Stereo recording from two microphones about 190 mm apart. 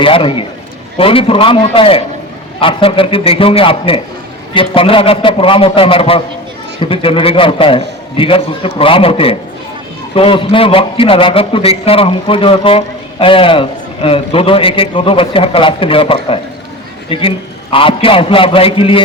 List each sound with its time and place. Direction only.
0.0 s a man's voice: 25° left (ahead or behind)